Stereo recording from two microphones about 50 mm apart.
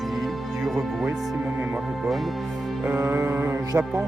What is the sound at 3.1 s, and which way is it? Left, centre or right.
Speech, right.